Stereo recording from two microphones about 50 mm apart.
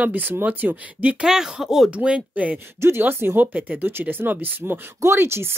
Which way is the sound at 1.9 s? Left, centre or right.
Right.